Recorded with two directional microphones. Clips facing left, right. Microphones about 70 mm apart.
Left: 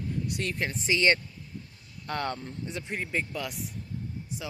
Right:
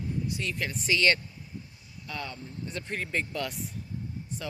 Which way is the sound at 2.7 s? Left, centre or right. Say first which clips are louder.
Even; centre.